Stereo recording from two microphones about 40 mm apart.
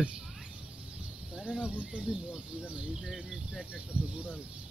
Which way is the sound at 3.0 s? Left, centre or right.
Centre.